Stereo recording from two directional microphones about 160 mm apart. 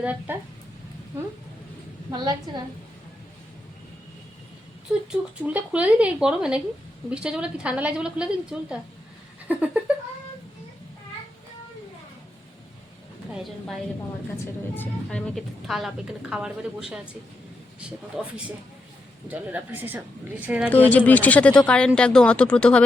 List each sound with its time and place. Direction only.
0.0 s speech: 10° right (ahead or behind)
2.0 s a woman's voice: 25° right (ahead or behind)
5.4 s a woman's voice: 10° right (ahead or behind)
13.3 s a woman's voice: centre (ahead or behind)
14.3 s speech: 10° left (ahead or behind)
15.4 s a woman's voice: centre (ahead or behind)
20.7 s speech: 10° left (ahead or behind)